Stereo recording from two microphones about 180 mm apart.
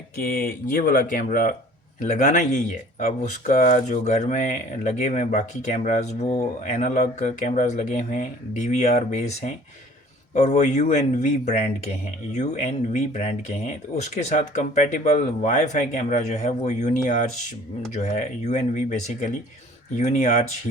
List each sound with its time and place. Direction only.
0.2 s speech: 55° left (ahead or behind)